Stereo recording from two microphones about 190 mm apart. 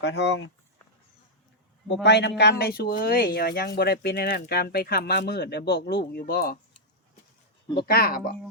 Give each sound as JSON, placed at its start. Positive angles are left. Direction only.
{"t": 0.0, "sound": "speech", "side_deg": 65}
{"t": 1.9, "sound": "speech", "side_deg": 65}
{"t": 7.7, "sound": "speech", "side_deg": 55}